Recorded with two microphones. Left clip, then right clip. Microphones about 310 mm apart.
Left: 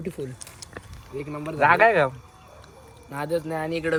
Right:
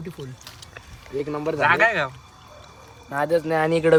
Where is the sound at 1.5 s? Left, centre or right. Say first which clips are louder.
Left 2 dB; centre.